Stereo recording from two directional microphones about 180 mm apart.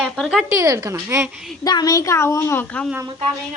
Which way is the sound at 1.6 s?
20° left (ahead or behind).